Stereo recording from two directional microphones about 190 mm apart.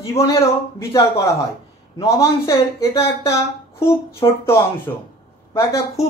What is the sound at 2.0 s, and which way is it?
A man's voice, 15° left (ahead or behind).